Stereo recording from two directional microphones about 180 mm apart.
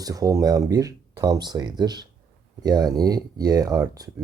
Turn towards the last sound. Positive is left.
turn(degrees=-20)  # may be behind; listen again after turning